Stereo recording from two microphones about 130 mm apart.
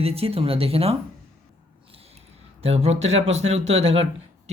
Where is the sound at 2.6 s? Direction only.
55° right (ahead or behind).